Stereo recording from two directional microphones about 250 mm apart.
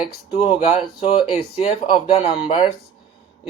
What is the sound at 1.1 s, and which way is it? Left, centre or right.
Speech, left.